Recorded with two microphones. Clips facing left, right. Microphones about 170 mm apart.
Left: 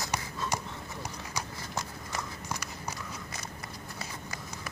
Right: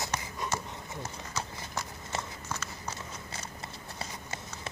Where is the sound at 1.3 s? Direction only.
10° left (ahead or behind).